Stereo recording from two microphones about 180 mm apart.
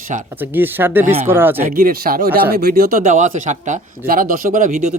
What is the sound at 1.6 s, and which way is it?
Speech, 50° right (ahead or behind).